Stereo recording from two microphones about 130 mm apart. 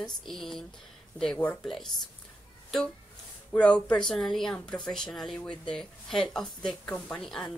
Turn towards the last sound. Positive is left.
turn(degrees=5)  # may be behind; listen again after turning